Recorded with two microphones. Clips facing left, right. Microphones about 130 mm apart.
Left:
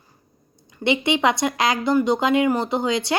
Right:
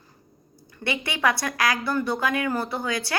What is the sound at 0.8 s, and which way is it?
Speech, 20° left (ahead or behind).